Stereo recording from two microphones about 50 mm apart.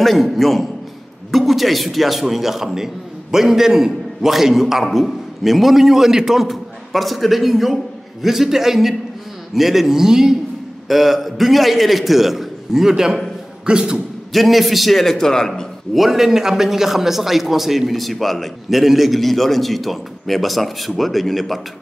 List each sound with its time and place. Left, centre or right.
0.0 s a man's voice: centre
14.3 s a man's voice: centre
15.9 s a man's voice: centre